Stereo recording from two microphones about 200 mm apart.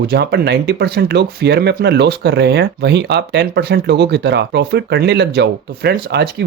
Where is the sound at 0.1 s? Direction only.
55° right (ahead or behind).